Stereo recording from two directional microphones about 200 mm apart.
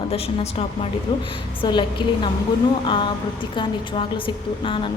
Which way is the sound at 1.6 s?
25° left (ahead or behind).